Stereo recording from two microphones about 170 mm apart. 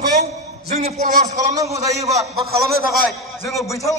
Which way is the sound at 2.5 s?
65° right (ahead or behind).